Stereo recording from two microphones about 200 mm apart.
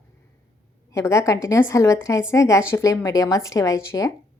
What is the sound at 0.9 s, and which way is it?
A woman's voice, 15° left (ahead or behind).